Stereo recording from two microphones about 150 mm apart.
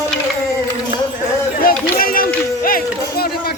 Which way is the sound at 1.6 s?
75° left (ahead or behind).